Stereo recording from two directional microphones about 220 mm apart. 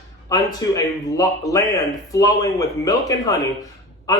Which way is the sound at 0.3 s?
15° left (ahead or behind).